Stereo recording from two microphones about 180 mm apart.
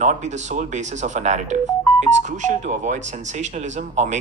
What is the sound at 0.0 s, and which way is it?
Speech, 40° right (ahead or behind).